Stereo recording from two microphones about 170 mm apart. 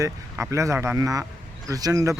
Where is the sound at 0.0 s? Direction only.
15° right (ahead or behind).